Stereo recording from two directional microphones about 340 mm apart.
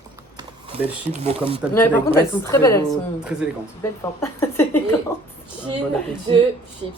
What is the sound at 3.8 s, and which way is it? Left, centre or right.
A woman's voice, centre.